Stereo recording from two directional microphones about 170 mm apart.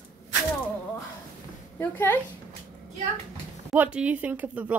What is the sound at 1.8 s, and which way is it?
Speech, 10° left (ahead or behind).